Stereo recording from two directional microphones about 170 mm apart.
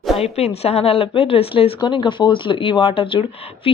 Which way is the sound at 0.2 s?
40° left (ahead or behind).